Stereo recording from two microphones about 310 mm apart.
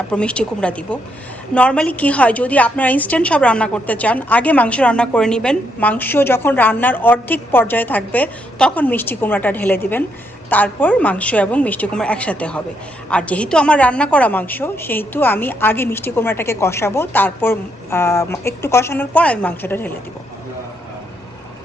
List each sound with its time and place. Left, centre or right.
0.1 s a woman's voice: centre